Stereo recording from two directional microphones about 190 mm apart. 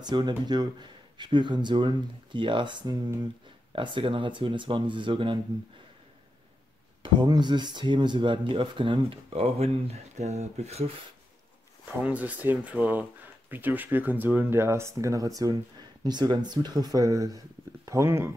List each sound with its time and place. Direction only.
0.0 s speech: 20° right (ahead or behind)
7.0 s speech: 25° right (ahead or behind)
12.0 s speech: 10° right (ahead or behind)